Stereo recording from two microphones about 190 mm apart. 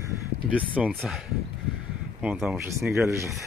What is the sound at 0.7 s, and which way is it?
Speech, 5° right (ahead or behind).